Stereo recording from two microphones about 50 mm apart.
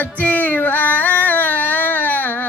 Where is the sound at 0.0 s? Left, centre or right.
Left.